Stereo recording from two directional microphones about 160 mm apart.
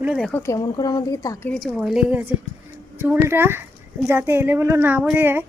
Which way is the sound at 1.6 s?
Centre (ahead or behind).